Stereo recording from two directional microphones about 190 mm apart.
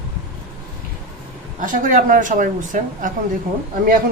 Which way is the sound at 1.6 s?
45° right (ahead or behind).